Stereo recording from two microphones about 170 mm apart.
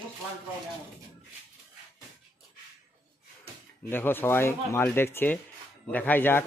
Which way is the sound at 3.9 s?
10° left (ahead or behind).